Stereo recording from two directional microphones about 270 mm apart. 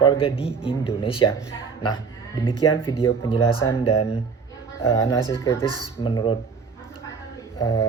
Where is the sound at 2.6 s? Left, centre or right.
Centre.